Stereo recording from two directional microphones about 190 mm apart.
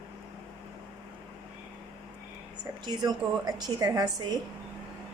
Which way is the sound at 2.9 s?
20° right (ahead or behind).